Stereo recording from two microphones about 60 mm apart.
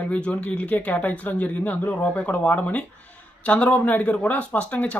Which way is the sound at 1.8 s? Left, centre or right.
Left.